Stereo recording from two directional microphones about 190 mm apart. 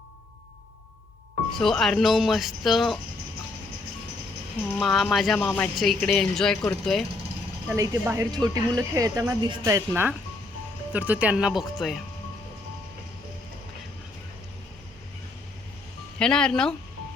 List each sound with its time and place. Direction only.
1.5 s speech: centre (ahead or behind)
4.8 s speech: centre (ahead or behind)
7.8 s speech: 15° right (ahead or behind)
16.1 s speech: 5° left (ahead or behind)